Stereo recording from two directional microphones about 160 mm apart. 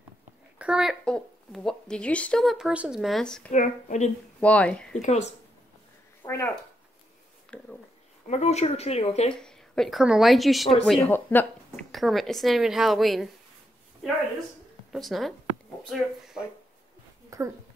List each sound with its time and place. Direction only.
0.6 s speech: 5° right (ahead or behind)
3.5 s speech: 50° left (ahead or behind)
4.4 s speech: 10° left (ahead or behind)
5.0 s speech: 45° left (ahead or behind)
6.2 s speech: 15° left (ahead or behind)
7.5 s a sound: 5° left (ahead or behind)
8.3 s speech: 45° left (ahead or behind)
9.3 s speech: 5° left (ahead or behind)
14.9 s a woman's voice: centre (ahead or behind)
17.3 s speech: 20° right (ahead or behind)